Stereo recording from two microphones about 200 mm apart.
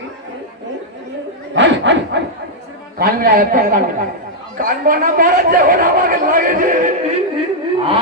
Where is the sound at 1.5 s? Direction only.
65° right (ahead or behind).